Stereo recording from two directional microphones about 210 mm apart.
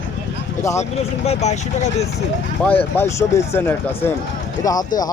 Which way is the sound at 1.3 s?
30° left (ahead or behind).